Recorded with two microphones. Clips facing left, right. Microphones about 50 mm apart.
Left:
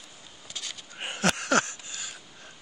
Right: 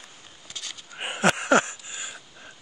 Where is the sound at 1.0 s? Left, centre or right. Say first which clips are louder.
Right 5 dB; centre.